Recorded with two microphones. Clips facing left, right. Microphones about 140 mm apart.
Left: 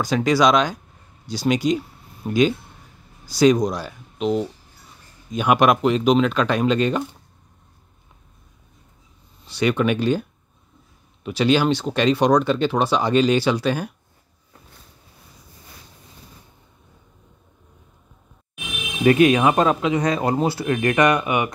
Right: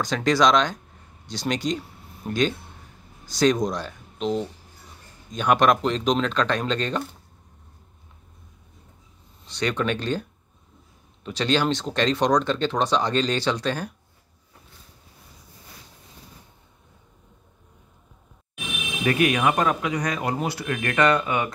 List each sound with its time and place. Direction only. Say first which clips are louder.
0.0 s speech: left 3 dB; 5° left (ahead or behind)
9.4 s speech: left 5 dB; 5° left (ahead or behind)
11.2 s speech: left 5 dB; 5° left (ahead or behind)
19.0 s speech: left 6 dB; 25° left (ahead or behind)
20.9 s speech: left 1 dB; 15° left (ahead or behind)